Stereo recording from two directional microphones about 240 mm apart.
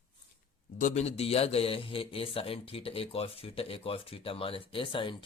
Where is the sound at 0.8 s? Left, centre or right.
Left.